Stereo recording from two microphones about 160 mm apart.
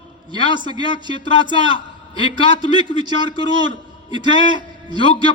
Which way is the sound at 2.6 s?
25° right (ahead or behind).